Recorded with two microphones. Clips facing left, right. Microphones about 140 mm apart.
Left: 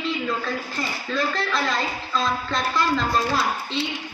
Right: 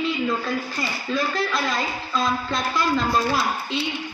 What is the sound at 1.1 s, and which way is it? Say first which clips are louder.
A woman's voice: right 1 dB; 10° right (ahead or behind).